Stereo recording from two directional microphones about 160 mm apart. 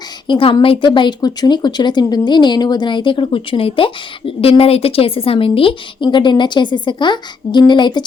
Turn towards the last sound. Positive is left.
turn(degrees=30)  # may be behind; listen again after turning